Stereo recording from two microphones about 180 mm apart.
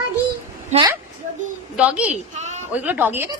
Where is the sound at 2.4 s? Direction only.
40° right (ahead or behind).